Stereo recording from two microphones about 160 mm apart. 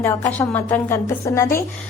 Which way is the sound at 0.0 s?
15° left (ahead or behind).